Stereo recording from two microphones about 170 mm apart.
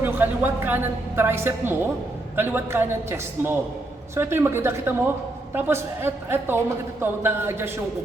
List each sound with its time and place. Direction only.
0.0 s a woman's voice: 10° right (ahead or behind)